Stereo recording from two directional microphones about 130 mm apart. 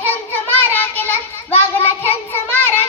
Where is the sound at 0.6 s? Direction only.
15° left (ahead or behind).